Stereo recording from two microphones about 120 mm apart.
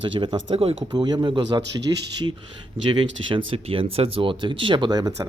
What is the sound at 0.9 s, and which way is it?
Speech, 35° right (ahead or behind).